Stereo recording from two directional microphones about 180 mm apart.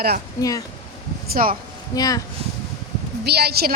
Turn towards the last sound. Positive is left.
turn(degrees=-60)  # may be behind; listen again after turning